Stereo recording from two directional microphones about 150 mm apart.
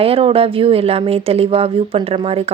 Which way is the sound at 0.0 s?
40° right (ahead or behind).